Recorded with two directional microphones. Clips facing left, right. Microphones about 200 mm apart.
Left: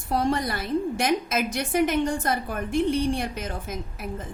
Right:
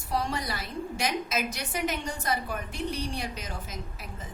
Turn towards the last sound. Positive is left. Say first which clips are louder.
# left 7 dB
turn(degrees=55)  # may be behind; listen again after turning